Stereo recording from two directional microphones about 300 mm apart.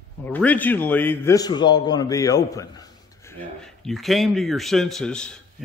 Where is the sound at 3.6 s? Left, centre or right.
Centre.